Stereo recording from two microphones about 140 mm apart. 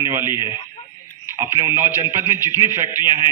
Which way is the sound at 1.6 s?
20° right (ahead or behind).